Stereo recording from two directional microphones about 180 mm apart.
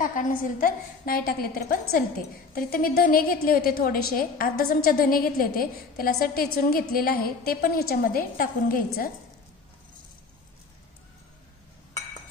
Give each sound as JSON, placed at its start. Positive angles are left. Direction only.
{"t": 0.0, "sound": "a woman's voice", "side_deg": 50}